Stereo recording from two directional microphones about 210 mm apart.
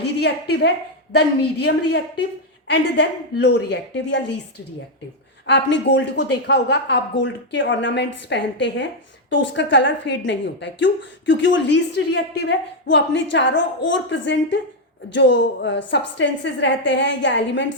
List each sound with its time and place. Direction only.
0.0 s a woman's voice: 50° left (ahead or behind)
2.6 s a woman's voice: 55° left (ahead or behind)